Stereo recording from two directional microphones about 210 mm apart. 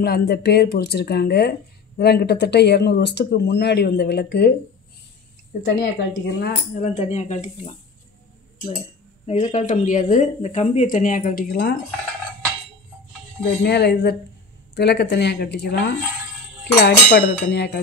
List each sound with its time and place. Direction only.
0.0 s speech: 50° left (ahead or behind)
5.6 s speech: 55° left (ahead or behind)
6.8 s speech: 35° left (ahead or behind)
9.2 s speech: 30° left (ahead or behind); by 11.7 s 45° left (ahead or behind)
13.7 s speech: 50° left (ahead or behind)
16.8 s speech: 50° left (ahead or behind)